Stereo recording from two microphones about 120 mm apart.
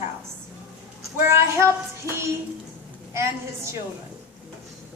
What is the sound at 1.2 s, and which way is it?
A woman's voice, 20° right (ahead or behind).